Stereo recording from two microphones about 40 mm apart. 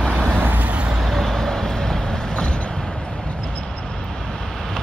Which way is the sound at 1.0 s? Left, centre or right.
Centre.